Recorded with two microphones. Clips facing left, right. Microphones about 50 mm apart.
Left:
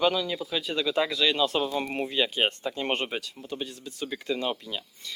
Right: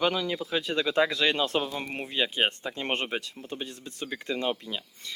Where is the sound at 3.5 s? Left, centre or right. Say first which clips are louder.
Left 2 dB; right.